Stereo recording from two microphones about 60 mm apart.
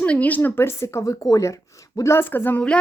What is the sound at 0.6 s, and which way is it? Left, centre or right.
Speech, left.